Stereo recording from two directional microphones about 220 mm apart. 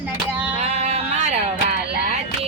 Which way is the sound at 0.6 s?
30° right (ahead or behind).